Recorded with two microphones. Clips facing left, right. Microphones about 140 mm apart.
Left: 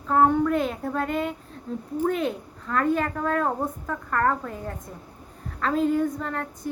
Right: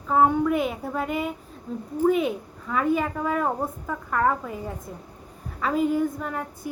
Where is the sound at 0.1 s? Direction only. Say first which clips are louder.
Even; 5° right (ahead or behind).